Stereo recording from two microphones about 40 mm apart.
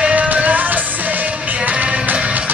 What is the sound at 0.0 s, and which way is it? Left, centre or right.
Music, right.